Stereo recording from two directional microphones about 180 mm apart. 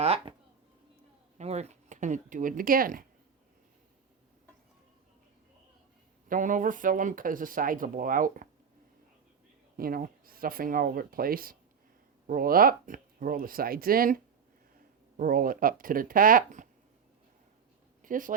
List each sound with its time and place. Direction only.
0.0 s speech: 35° right (ahead or behind)
1.4 s speech: 35° right (ahead or behind)
6.2 s speech: 50° right (ahead or behind)
9.7 s speech: 55° right (ahead or behind)
18.0 s speech: 50° right (ahead or behind)